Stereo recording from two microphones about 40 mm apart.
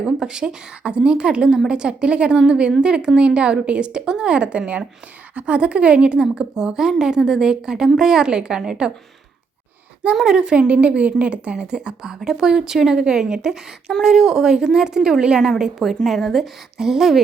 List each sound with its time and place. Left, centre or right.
0.0 s a woman's voice: right
10.2 s a woman's voice: right